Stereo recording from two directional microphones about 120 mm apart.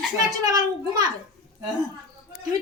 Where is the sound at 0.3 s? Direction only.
30° right (ahead or behind).